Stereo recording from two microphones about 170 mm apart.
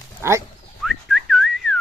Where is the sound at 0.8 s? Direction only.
Centre (ahead or behind).